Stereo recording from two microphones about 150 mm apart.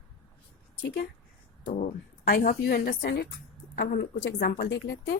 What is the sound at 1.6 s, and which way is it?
Speech, 65° left (ahead or behind).